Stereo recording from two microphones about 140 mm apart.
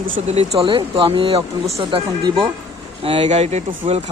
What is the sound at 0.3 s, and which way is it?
Speech, 50° right (ahead or behind).